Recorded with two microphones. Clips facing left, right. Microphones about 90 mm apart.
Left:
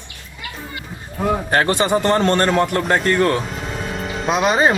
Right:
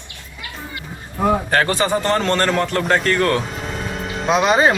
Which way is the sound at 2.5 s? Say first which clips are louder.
Left 2 dB; 15° left (ahead or behind).